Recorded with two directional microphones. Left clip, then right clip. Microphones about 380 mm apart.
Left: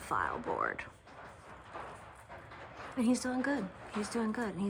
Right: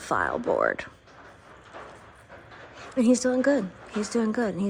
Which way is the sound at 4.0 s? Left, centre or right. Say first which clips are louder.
Right 9 dB; centre.